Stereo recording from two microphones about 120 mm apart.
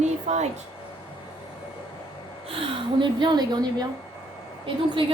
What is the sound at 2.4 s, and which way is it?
Speech, 45° right (ahead or behind).